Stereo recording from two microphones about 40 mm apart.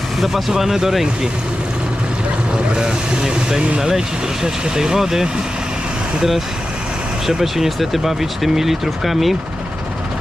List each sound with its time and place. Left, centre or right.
0.2 s speech: centre
2.7 s speech: centre
7.3 s speech: centre